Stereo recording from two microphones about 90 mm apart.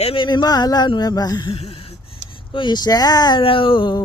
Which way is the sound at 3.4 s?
80° left.